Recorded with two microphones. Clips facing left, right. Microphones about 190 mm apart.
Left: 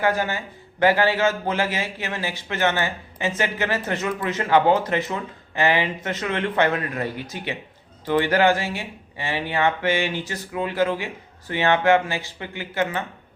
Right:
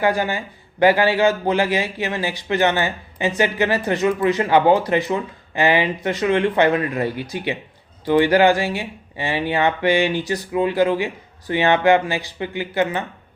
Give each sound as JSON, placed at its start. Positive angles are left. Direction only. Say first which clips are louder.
{"t": 0.0, "sound": "a man's voice", "louder": "right 3 dB", "side_deg": -15}